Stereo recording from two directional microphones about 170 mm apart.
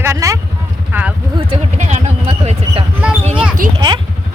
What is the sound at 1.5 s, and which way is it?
Speech, 40° right (ahead or behind).